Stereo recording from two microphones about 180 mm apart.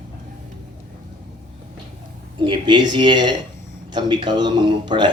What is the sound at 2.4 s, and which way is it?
A man's voice, 25° right (ahead or behind).